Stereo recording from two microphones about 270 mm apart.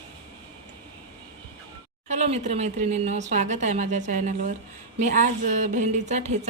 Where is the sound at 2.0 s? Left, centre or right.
Right.